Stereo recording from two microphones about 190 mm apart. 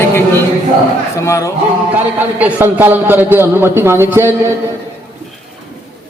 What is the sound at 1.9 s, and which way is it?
A man's voice, 10° right (ahead or behind).